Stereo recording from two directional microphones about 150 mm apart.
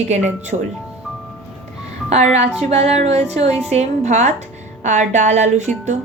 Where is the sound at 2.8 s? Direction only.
45° right (ahead or behind).